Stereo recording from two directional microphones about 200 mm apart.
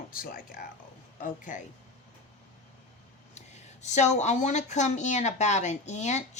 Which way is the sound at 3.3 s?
35° left (ahead or behind).